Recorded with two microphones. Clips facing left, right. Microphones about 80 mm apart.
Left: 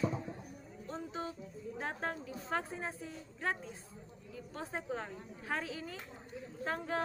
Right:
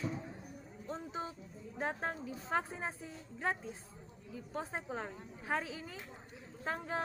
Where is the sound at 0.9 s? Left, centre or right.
Centre.